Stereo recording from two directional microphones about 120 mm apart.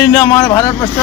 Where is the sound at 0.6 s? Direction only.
35° left (ahead or behind).